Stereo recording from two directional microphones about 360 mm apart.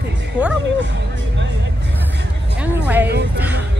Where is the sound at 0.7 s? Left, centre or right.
Right.